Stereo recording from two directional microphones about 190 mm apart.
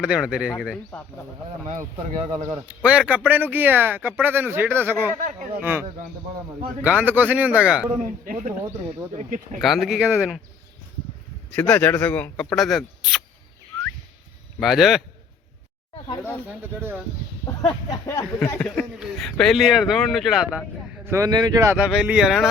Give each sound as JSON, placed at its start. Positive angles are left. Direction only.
{"t": 0.0, "sound": "speech", "side_deg": -5}
{"t": 1.5, "sound": "speech", "side_deg": -40}
{"t": 2.6, "sound": "speech", "side_deg": -5}
{"t": 5.1, "sound": "speech", "side_deg": -45}
{"t": 6.8, "sound": "speech", "side_deg": -10}
{"t": 8.0, "sound": "speech", "side_deg": -45}
{"t": 9.6, "sound": "speech", "side_deg": 0}
{"t": 11.5, "sound": "speech", "side_deg": 10}
{"t": 14.6, "sound": "speech", "side_deg": 0}
{"t": 16.5, "sound": "speech", "side_deg": -10}
{"t": 17.4, "sound": "speech", "side_deg": 20}
{"t": 18.9, "sound": "speech", "side_deg": 0}
{"t": 21.0, "sound": "speech", "side_deg": -15}